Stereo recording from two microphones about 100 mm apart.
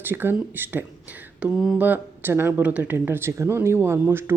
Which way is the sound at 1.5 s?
Centre (ahead or behind).